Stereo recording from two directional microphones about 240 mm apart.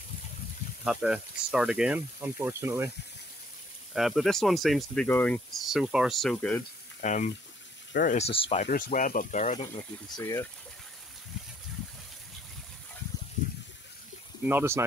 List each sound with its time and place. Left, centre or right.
0.8 s speech: centre
3.9 s speech: centre
7.0 s speech: left
10.1 s speech: centre
14.5 s speech: centre